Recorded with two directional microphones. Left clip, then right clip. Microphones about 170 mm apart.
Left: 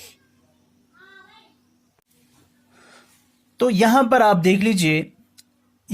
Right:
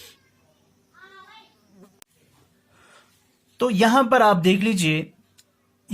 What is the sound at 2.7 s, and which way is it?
Snort, 30° left (ahead or behind).